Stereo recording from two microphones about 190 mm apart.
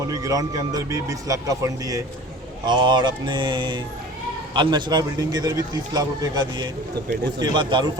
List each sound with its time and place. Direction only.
0.1 s a man's voice: 20° right (ahead or behind)